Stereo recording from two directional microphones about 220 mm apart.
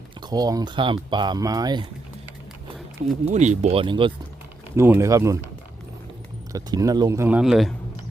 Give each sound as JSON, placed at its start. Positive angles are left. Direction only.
{"t": 0.2, "sound": "speech", "side_deg": -20}
{"t": 3.0, "sound": "speech", "side_deg": -35}
{"t": 6.5, "sound": "speech", "side_deg": -15}